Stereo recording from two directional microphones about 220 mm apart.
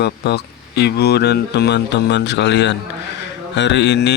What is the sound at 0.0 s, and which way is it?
A man's voice, 50° left (ahead or behind).